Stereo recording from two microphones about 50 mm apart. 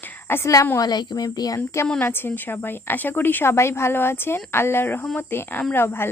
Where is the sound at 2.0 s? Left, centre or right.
Left.